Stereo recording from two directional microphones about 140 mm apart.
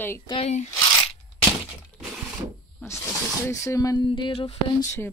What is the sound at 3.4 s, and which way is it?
Speech, 20° left (ahead or behind).